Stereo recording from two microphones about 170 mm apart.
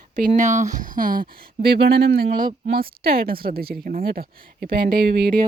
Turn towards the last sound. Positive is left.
turn(degrees=-75)  # may be behind; listen again after turning